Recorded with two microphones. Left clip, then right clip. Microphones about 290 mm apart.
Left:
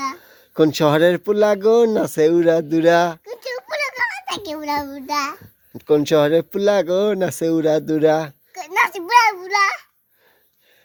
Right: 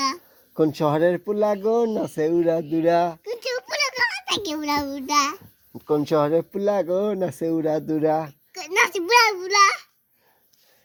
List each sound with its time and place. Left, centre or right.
0.5 s speech: left
3.2 s a sound: centre
5.7 s speech: left
8.5 s a child's voice: centre